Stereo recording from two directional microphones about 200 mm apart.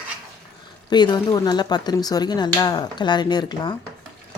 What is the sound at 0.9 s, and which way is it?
Speech, 20° left (ahead or behind).